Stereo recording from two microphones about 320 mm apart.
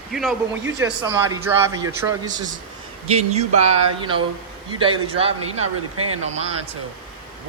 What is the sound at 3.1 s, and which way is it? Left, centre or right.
Speech, centre.